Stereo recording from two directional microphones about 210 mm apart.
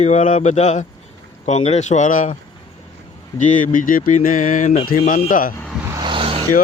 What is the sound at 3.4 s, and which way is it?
Speech, 35° left (ahead or behind).